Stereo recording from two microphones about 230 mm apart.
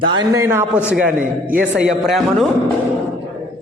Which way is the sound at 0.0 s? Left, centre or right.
Centre.